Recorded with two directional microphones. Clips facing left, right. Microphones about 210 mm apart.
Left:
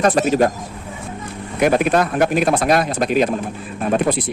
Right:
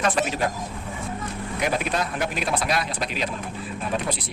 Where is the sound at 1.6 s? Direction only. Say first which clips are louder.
Left 10 dB; 55° left (ahead or behind).